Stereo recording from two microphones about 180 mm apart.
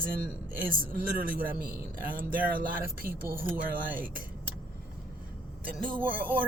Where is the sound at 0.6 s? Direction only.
50° right (ahead or behind).